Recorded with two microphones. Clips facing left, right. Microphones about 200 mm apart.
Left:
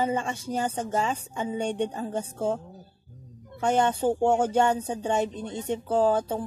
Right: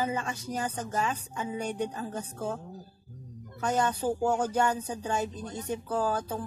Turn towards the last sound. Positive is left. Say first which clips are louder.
# left 6 dB
turn(degrees=25)  # may be behind; listen again after turning